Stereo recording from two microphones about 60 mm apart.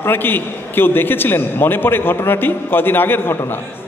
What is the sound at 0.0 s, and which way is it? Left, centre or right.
A man's voice, left.